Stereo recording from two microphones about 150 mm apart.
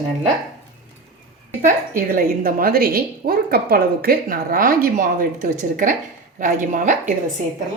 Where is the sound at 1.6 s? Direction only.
70° right (ahead or behind).